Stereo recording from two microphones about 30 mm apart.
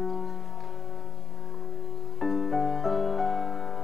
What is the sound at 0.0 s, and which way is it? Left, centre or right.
Music, centre.